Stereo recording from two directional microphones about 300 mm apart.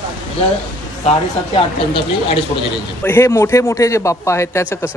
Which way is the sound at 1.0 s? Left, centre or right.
Centre.